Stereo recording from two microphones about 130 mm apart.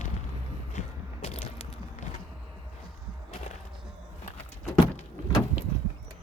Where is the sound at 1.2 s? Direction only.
55° left (ahead or behind).